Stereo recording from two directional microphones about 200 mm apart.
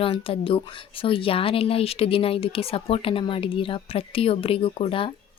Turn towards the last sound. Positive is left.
turn(degrees=25)  # may be behind; listen again after turning